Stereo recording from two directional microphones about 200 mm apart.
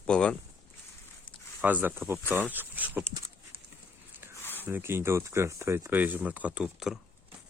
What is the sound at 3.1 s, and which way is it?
Horse, 15° right (ahead or behind).